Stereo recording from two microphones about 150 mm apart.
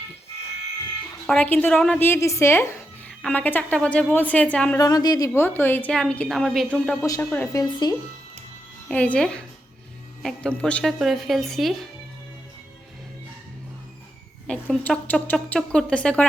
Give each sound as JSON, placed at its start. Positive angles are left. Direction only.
{"t": 1.3, "sound": "a woman's voice", "side_deg": 10}
{"t": 4.8, "sound": "a woman's voice", "side_deg": 25}
{"t": 7.0, "sound": "speech", "side_deg": 20}
{"t": 8.9, "sound": "a woman's voice", "side_deg": 10}
{"t": 14.4, "sound": "a woman's voice", "side_deg": 5}